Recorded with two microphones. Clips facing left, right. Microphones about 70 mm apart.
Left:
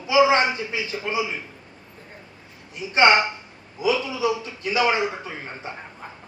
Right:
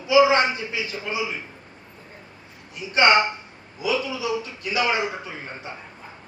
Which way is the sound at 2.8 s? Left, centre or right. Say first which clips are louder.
Left 1 dB; left.